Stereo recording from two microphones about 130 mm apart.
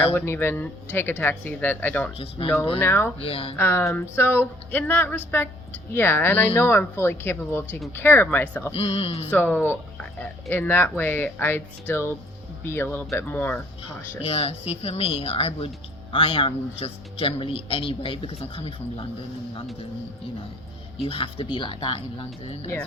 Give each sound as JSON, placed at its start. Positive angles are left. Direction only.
{"t": 0.1, "sound": "speech", "side_deg": 15}
{"t": 2.1, "sound": "speech", "side_deg": 50}
{"t": 2.7, "sound": "speech", "side_deg": 20}
{"t": 3.2, "sound": "speech", "side_deg": 45}
{"t": 3.6, "sound": "speech", "side_deg": 20}
{"t": 8.7, "sound": "speech", "side_deg": 50}
{"t": 9.3, "sound": "speech", "side_deg": 15}
{"t": 14.3, "sound": "speech", "side_deg": 50}
{"t": 21.0, "sound": "speech", "side_deg": 45}